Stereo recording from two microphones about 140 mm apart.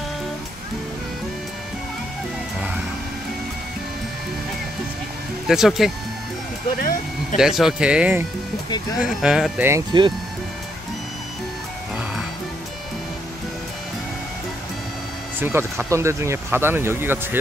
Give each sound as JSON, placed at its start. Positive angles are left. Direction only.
{"t": 5.5, "sound": "speech", "side_deg": 0}
{"t": 6.8, "sound": "a sound", "side_deg": 85}
{"t": 7.3, "sound": "speech", "side_deg": -5}
{"t": 9.9, "sound": "speech", "side_deg": -30}
{"t": 15.5, "sound": "speech", "side_deg": -20}